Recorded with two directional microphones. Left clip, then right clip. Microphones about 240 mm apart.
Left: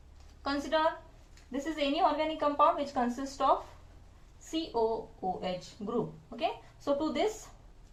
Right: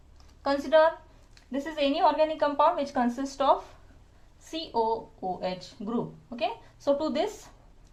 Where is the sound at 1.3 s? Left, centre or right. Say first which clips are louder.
Right 3 dB; right.